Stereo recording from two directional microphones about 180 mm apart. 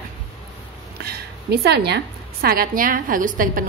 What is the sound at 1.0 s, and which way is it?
A woman's voice, 65° right (ahead or behind).